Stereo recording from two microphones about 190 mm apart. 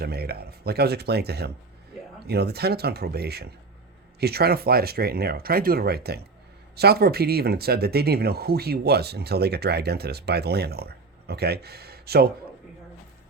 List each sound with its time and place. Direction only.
0.0 s speech: 55° right (ahead or behind)